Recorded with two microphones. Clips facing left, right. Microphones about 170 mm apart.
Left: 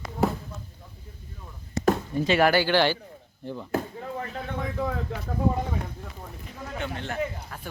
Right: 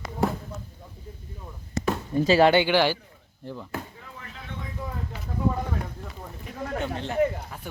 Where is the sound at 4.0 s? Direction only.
45° left (ahead or behind).